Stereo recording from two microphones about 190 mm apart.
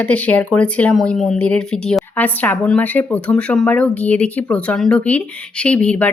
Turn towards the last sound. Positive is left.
turn(degrees=5)  # may be behind; listen again after turning